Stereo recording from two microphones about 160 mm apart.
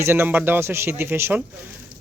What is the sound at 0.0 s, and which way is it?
Speech, 15° right (ahead or behind).